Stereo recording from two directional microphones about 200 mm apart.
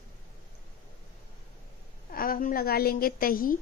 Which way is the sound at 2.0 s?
45° left (ahead or behind).